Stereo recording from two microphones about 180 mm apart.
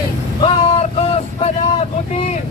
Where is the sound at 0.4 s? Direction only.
35° left (ahead or behind).